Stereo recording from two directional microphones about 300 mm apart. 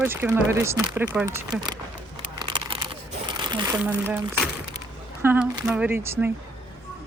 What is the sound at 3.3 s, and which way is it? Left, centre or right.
Crumpling, centre.